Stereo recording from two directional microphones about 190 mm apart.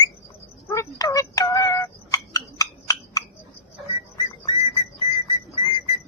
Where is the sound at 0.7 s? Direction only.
20° left (ahead or behind).